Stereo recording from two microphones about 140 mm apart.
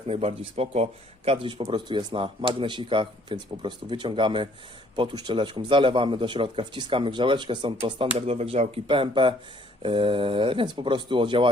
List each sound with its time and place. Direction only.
0.1 s speech: 45° right (ahead or behind)